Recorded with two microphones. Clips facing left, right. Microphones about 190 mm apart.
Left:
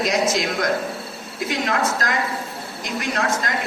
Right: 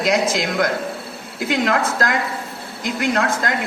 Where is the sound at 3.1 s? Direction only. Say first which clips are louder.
Right 1 dB; 55° right (ahead or behind).